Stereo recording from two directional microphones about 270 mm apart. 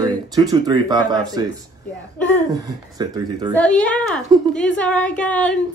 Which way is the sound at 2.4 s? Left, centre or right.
Centre.